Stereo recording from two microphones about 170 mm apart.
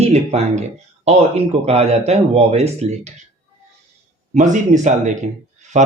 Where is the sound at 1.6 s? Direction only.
40° right (ahead or behind).